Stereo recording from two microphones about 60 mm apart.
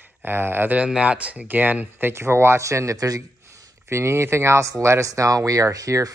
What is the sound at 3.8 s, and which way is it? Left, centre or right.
Speech, right.